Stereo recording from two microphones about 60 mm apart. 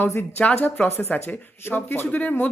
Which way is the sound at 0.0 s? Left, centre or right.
Left.